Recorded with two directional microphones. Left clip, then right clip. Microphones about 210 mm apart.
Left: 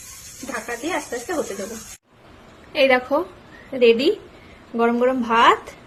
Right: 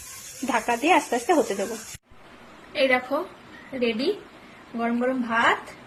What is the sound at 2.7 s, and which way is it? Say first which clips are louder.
A woman's voice: left 5 dB; 30° left (ahead or behind).